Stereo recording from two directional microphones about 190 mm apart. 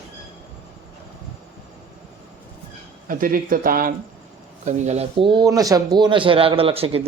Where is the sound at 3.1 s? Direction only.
45° right (ahead or behind).